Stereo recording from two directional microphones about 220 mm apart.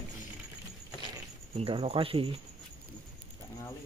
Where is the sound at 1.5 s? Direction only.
25° right (ahead or behind).